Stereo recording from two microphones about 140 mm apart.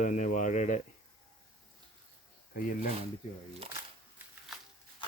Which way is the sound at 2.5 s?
80° left.